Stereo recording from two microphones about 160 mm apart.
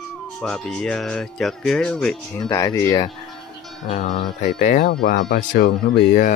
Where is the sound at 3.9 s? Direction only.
50° left (ahead or behind).